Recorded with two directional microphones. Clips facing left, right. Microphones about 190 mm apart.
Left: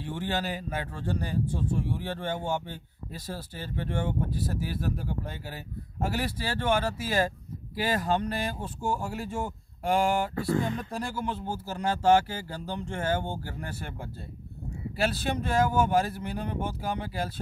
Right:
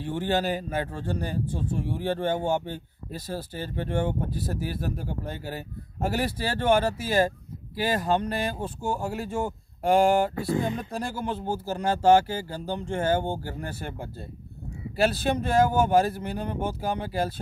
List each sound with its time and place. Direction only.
0.0 s speech: 45° right (ahead or behind)
6.9 s speech: 25° right (ahead or behind)
9.8 s speech: 45° right (ahead or behind)
10.3 s speech: 15° right (ahead or behind)
11.0 s speech: 45° right (ahead or behind)
15.0 s speech: 40° right (ahead or behind)